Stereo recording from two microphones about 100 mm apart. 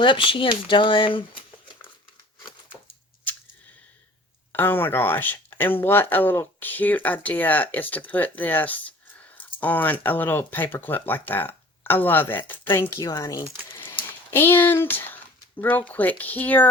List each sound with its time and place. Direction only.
0.0 s speech: 55° left (ahead or behind)
4.5 s speech: 20° left (ahead or behind)
12.9 s speech: 35° left (ahead or behind)
14.3 s speech: 25° left (ahead or behind)